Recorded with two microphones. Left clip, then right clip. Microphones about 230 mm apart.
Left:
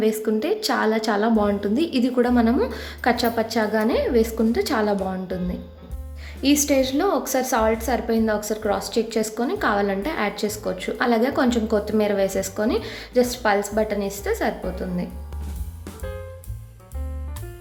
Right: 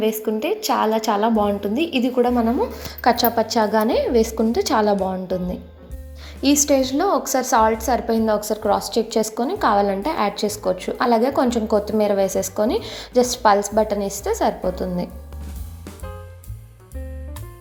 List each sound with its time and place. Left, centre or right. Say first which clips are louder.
0.0 s speech: even; centre
2.7 s a woman's voice: right 4 dB; centre